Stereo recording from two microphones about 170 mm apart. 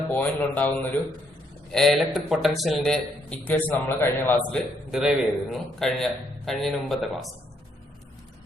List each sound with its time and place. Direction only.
0.1 s a man's voice: 10° left (ahead or behind)
1.7 s a man's voice: centre (ahead or behind)
4.9 s a man's voice: centre (ahead or behind)